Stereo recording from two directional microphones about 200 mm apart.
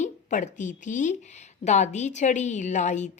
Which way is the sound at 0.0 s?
35° left (ahead or behind).